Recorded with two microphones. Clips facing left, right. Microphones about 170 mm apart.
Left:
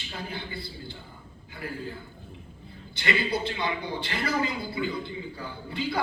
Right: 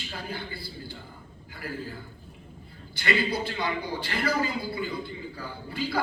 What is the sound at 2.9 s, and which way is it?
A man's voice, 25° left (ahead or behind).